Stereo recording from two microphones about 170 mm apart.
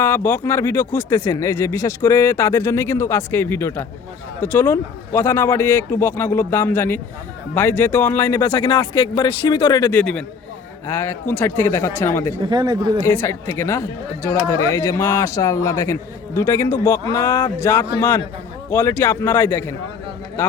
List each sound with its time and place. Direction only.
0.0 s speech: 15° left (ahead or behind)
8.4 s speech: 30° left (ahead or behind)
9.9 s a man's voice: 5° left (ahead or behind)
12.4 s speech: 25° right (ahead or behind)
13.0 s speech: 15° left (ahead or behind)